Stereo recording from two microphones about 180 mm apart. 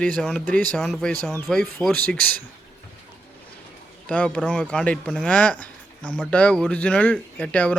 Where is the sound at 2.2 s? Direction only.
55° right (ahead or behind).